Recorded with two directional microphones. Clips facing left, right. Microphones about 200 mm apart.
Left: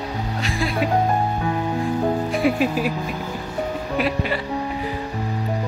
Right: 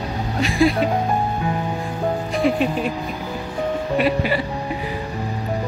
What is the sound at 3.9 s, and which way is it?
Speech, centre (ahead or behind).